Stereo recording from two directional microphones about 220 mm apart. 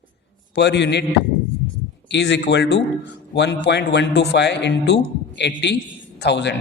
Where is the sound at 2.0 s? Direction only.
50° left (ahead or behind).